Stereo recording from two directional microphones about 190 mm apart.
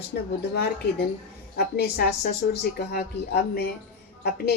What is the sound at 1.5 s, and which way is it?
Speech, 55° left (ahead or behind).